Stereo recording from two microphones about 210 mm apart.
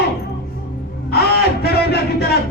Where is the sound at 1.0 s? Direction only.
50° left (ahead or behind).